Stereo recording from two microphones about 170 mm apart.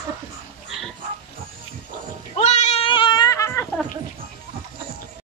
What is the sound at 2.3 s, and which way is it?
Goat, 45° left (ahead or behind).